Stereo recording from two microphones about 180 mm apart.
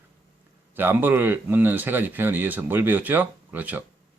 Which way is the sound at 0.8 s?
10° right (ahead or behind).